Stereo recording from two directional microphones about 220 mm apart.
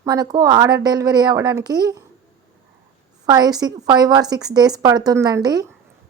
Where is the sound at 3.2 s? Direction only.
15° right (ahead or behind).